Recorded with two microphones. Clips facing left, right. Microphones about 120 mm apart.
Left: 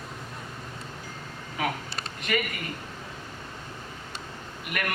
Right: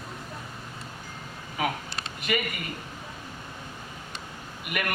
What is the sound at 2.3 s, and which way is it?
Speech, 15° right (ahead or behind).